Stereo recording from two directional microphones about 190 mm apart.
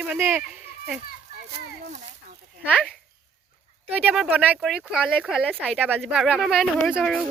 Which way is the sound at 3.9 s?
5° right (ahead or behind).